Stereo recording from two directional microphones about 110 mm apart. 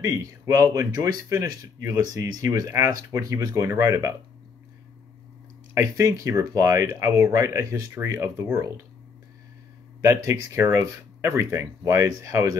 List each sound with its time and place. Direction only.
0.0 s speech: 35° right (ahead or behind)
5.8 s speech: 30° right (ahead or behind)
10.0 s speech: 30° right (ahead or behind)